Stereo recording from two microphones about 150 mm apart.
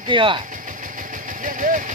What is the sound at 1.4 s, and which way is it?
Vehicle, 60° right (ahead or behind).